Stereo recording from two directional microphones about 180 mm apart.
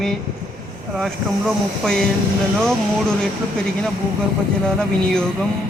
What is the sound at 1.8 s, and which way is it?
Speech, 5° left (ahead or behind).